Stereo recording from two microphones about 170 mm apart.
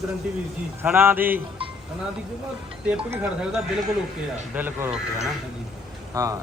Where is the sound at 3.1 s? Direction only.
10° right (ahead or behind).